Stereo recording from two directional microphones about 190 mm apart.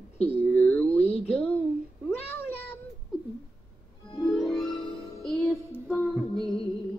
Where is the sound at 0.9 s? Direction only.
35° left (ahead or behind).